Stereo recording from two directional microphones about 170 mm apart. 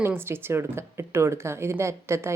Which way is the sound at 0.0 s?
15° right (ahead or behind).